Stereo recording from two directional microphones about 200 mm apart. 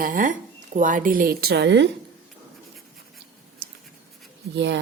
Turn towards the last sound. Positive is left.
turn(degrees=-60)  # may be behind; listen again after turning